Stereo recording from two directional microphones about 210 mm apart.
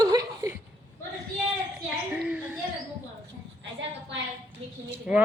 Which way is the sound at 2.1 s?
5° right (ahead or behind).